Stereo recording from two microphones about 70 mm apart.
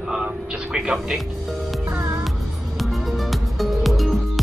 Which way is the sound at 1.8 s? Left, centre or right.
Right.